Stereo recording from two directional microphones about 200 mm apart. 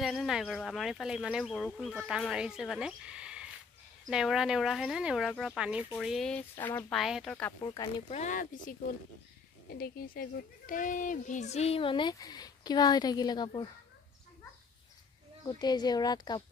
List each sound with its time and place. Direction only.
0.0 s speech: centre (ahead or behind)
6.5 s speech: 15° left (ahead or behind)
6.9 s speech: centre (ahead or behind)
7.6 s speech: 20° left (ahead or behind)
8.1 s speech: 40° left (ahead or behind); by 13.7 s 20° left (ahead or behind)
15.4 s speech: 20° left (ahead or behind)